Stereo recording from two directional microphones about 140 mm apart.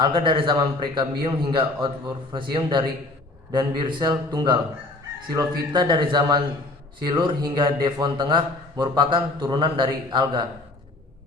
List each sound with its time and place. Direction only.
0.0 s speech: 35° right (ahead or behind)